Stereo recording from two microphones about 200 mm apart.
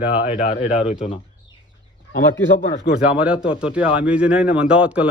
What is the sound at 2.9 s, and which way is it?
Speech, 5° right (ahead or behind).